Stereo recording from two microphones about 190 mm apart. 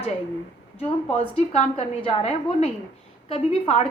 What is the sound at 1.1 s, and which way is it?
A woman's voice, 35° left (ahead or behind).